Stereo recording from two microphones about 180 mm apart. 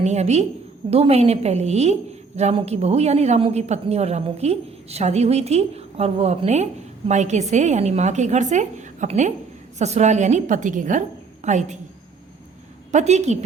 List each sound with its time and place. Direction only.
0.0 s a woman's voice: 40° right (ahead or behind)
12.9 s a woman's voice: 40° right (ahead or behind)